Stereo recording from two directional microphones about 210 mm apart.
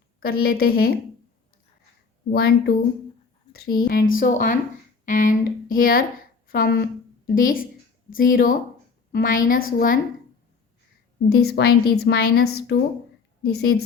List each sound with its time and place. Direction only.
0.4 s a woman's voice: 45° left (ahead or behind)
2.3 s a woman's voice: 45° left (ahead or behind)
11.3 s a woman's voice: 50° left (ahead or behind)